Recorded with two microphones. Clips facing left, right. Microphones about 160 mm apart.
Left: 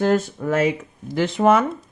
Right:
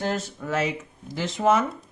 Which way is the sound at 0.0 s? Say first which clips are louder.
Left 9 dB; 50° left (ahead or behind).